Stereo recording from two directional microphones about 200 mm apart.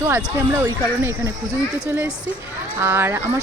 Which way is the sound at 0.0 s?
10° right (ahead or behind).